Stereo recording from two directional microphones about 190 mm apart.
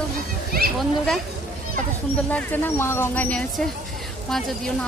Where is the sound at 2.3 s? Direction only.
10° left (ahead or behind).